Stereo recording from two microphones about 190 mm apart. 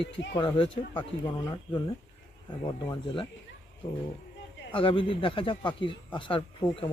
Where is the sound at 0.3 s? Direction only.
25° left (ahead or behind).